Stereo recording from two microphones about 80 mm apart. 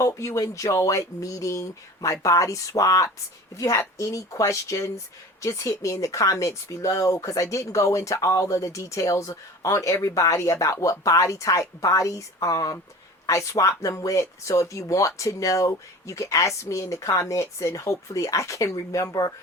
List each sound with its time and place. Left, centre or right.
0.0 s a woman's voice: left